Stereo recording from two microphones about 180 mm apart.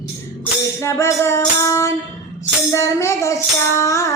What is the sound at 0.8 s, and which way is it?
Music, 15° left (ahead or behind).